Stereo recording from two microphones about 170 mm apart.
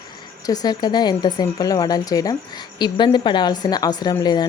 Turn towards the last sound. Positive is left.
turn(degrees=25)  # may be behind; listen again after turning